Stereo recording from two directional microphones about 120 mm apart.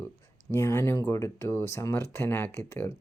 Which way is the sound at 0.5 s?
25° left (ahead or behind).